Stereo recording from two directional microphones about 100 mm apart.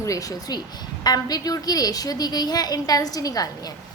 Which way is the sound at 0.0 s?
35° left (ahead or behind).